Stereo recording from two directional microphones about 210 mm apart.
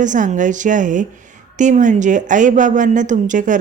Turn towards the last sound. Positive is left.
turn(degrees=-35)  # may be behind; listen again after turning